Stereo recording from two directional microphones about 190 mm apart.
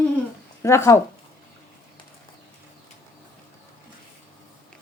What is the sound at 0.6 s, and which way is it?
Speech, 15° left (ahead or behind).